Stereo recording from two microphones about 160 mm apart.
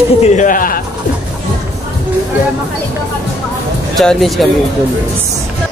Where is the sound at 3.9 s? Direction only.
Centre (ahead or behind).